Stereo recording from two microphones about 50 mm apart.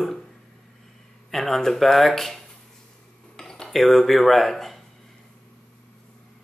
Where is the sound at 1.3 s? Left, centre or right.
Centre.